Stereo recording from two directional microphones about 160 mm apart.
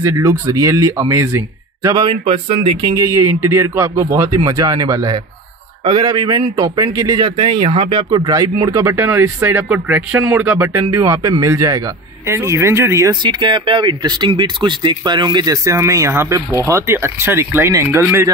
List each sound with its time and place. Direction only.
0.0 s speech: 15° right (ahead or behind); by 2.9 s 35° right (ahead or behind)
2.9 s speech: 20° right (ahead or behind)